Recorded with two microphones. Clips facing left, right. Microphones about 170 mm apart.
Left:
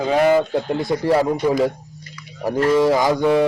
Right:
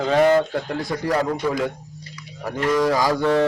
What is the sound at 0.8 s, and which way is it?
Mechanisms, 25° left (ahead or behind).